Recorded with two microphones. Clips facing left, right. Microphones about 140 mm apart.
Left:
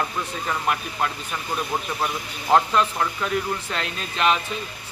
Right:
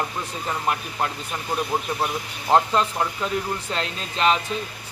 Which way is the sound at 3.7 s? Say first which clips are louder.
Right 1 dB; 30° right (ahead or behind).